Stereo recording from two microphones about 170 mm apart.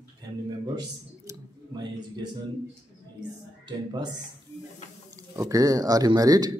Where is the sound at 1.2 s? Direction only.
25° right (ahead or behind).